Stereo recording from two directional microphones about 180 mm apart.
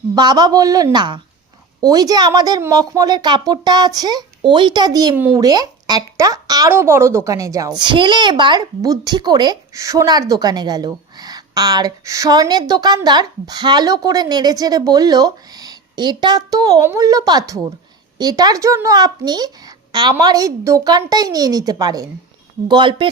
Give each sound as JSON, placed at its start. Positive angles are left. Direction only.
{"t": 0.1, "sound": "speech", "side_deg": -25}